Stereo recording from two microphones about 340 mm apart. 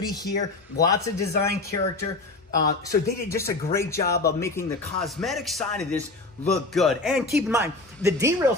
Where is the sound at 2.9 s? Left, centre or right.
Centre.